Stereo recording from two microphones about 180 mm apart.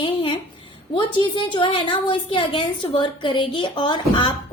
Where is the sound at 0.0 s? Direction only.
30° left (ahead or behind).